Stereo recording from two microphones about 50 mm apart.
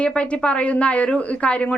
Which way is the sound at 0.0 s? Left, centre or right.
Left.